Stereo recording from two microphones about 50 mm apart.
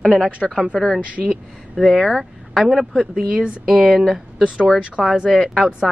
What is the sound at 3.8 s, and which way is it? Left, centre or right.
Speech, centre.